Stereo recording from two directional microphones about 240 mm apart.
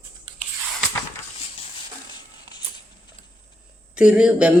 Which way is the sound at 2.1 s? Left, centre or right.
Centre.